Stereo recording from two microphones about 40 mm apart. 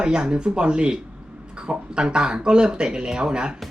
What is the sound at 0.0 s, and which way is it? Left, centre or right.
Speech, right.